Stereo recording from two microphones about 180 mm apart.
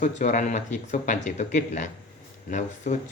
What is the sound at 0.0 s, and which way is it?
Speech, 45° left (ahead or behind).